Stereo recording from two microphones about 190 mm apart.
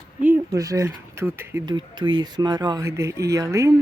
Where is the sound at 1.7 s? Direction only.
25° right (ahead or behind).